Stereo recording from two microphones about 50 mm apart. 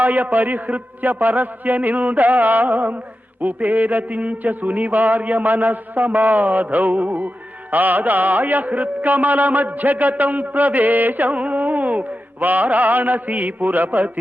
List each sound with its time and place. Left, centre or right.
0.0 s mantra: right